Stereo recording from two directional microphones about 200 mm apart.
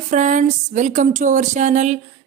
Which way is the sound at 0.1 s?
40° right (ahead or behind).